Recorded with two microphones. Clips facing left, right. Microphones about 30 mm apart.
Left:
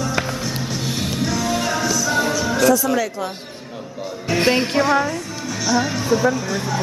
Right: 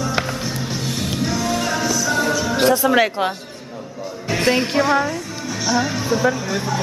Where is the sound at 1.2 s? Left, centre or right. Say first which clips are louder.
Even; centre.